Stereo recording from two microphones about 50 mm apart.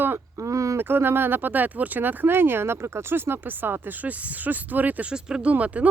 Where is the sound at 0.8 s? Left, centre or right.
Right.